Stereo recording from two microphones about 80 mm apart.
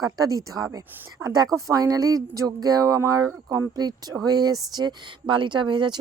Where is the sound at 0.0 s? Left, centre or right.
Right.